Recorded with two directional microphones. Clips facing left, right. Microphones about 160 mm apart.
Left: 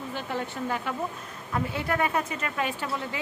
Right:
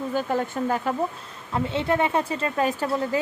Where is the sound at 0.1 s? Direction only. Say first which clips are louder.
Right 7 dB; 40° right (ahead or behind).